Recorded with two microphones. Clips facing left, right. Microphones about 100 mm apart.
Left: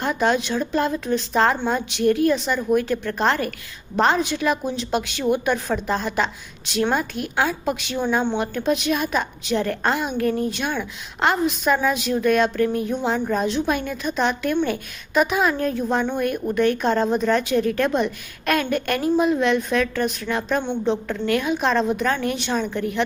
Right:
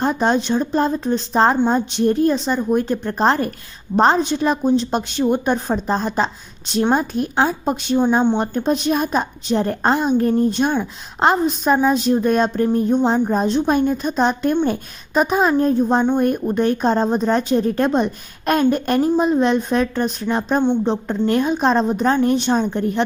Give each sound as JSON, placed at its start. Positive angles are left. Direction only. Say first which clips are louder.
{"t": 0.0, "sound": "speech", "louder": "right 3 dB", "side_deg": -35}
{"t": 1.5, "sound": "a woman's voice", "louder": "right 6 dB", "side_deg": -20}
{"t": 1.9, "sound": "speech", "louder": "right 2 dB", "side_deg": -35}